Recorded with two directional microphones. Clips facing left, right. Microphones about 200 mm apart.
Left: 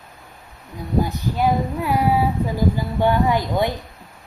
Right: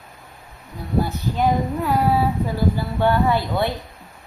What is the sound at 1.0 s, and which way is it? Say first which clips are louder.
Child singing: right 1 dB; 15° left (ahead or behind).